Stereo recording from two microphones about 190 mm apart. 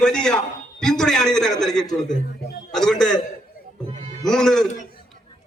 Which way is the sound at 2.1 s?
40° left (ahead or behind).